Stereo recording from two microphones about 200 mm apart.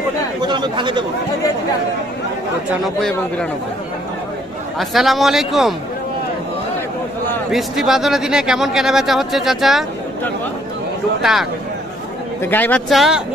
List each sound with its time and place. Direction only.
0.4 s speech: 25° right (ahead or behind)
2.8 s speech: 5° left (ahead or behind)
4.7 s speech: centre (ahead or behind)
7.5 s speech: centre (ahead or behind)
12.4 s speech: 10° left (ahead or behind)